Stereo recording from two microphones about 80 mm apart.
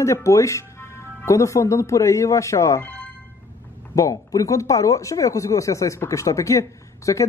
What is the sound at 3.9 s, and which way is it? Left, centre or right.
Speech, left.